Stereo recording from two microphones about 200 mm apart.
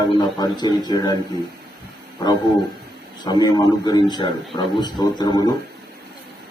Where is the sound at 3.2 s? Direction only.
20° left (ahead or behind).